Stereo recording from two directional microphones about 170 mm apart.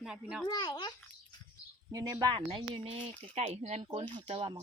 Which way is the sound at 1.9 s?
20° right (ahead or behind).